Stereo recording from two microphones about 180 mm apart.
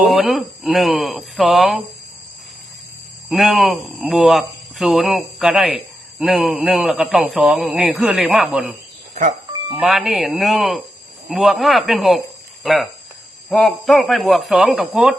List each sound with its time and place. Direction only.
0.1 s speech: centre (ahead or behind)
3.2 s speech: centre (ahead or behind)
9.5 s chicken: 15° right (ahead or behind)
9.8 s speech: centre (ahead or behind)